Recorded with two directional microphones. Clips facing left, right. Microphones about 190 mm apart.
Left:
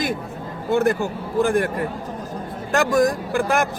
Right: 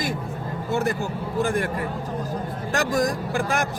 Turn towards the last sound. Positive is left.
turn(degrees=55)  # may be behind; listen again after turning